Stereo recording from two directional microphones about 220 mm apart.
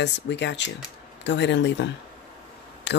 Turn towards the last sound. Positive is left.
turn(degrees=50)  # may be behind; listen again after turning